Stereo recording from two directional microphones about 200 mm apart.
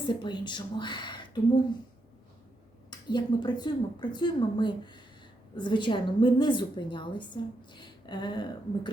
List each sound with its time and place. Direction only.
0.0 s speech: 25° left (ahead or behind)
3.1 s speech: 20° left (ahead or behind)